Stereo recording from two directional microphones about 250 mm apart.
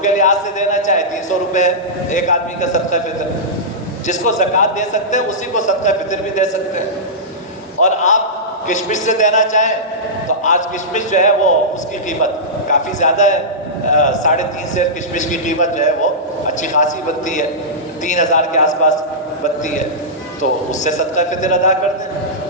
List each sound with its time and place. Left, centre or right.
0.0 s a man's voice: left
4.0 s a man's voice: left
7.8 s a man's voice: left
13.0 s a man's voice: left
20.4 s a man's voice: left